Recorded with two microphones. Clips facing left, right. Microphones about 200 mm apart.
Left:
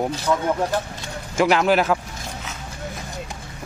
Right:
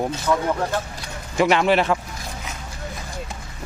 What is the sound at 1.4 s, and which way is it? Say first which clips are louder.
Speech: even; centre (ahead or behind).